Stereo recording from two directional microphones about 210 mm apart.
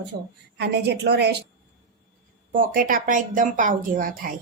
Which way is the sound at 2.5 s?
40° right (ahead or behind).